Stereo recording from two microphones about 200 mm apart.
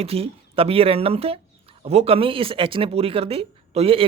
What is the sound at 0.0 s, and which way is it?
Speech, 30° right (ahead or behind).